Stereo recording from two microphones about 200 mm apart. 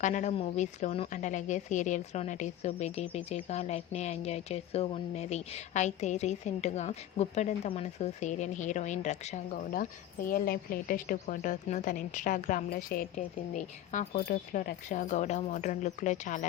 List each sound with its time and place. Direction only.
0.0 s a woman's voice: 35° left (ahead or behind)
10.2 s a woman's voice: 45° left (ahead or behind)